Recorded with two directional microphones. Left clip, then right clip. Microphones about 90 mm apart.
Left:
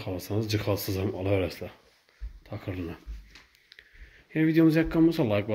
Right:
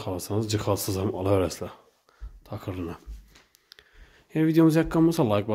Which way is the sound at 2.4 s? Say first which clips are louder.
Right 2 dB; 40° right (ahead or behind).